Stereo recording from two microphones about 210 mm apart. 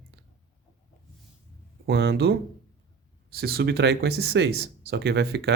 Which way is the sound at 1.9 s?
50° right (ahead or behind).